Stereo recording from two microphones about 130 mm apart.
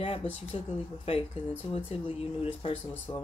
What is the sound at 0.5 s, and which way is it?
Speech, 45° left (ahead or behind).